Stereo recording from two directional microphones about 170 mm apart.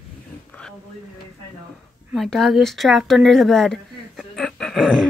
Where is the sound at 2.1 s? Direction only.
Centre (ahead or behind).